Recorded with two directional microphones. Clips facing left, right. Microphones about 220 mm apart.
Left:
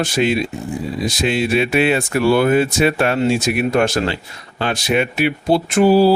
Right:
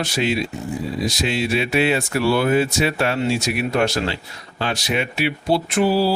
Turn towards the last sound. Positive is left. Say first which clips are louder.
# left 6 dB
turn(degrees=50)  # may be behind; listen again after turning